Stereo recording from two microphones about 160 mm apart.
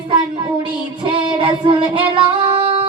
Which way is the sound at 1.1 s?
35° right (ahead or behind).